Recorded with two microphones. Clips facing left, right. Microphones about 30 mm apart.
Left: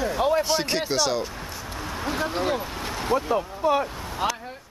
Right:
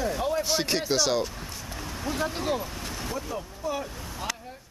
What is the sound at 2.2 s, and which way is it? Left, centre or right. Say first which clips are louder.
Speech: left 3 dB; centre.